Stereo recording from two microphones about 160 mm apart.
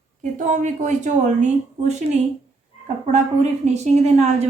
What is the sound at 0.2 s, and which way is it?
A woman's voice, 50° right (ahead or behind).